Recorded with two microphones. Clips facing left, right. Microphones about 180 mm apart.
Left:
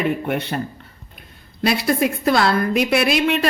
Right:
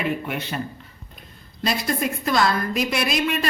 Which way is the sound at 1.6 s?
65° left (ahead or behind).